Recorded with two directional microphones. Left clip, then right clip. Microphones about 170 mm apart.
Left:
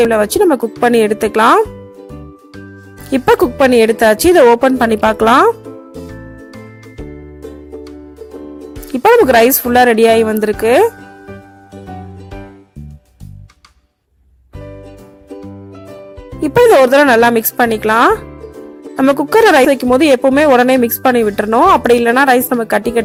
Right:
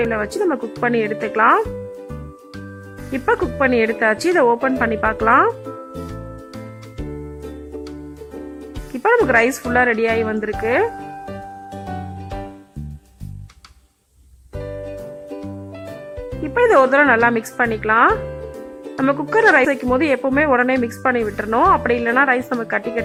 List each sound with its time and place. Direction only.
0.0 s a woman's voice: 40° left (ahead or behind)
3.1 s a woman's voice: 35° left (ahead or behind)
9.0 s a woman's voice: 30° left (ahead or behind)
14.8 s music: 5° left (ahead or behind)
16.4 s music: 40° left (ahead or behind)
16.7 s a woman's voice: 35° left (ahead or behind)